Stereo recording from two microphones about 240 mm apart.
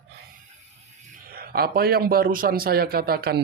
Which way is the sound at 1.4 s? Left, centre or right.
Right.